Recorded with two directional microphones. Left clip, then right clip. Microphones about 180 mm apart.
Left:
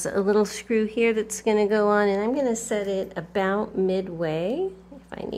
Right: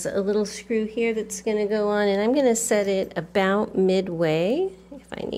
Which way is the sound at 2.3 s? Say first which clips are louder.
Right 5 dB; 25° right (ahead or behind).